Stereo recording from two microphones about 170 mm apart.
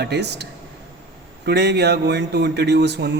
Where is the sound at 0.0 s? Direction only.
80° right.